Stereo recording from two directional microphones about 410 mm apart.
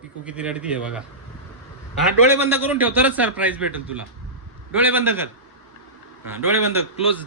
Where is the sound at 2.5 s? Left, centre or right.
Centre.